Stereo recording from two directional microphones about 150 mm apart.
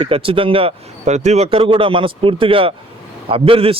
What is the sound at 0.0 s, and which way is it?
A man's voice, 35° right (ahead or behind).